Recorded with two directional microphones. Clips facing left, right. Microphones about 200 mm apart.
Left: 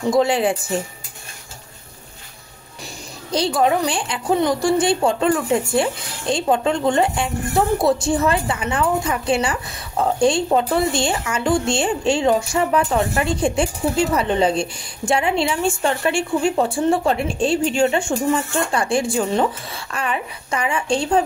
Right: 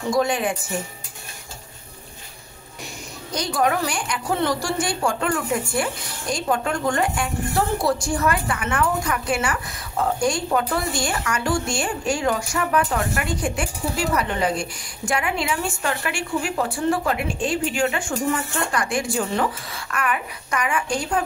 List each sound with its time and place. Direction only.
0.1 s speech: 25° left (ahead or behind)
3.3 s speech: 25° left (ahead or behind)